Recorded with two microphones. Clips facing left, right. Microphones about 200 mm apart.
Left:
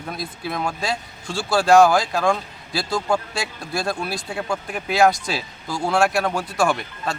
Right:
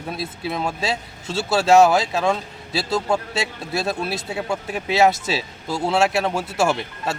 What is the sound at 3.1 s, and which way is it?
Speech, 25° right (ahead or behind).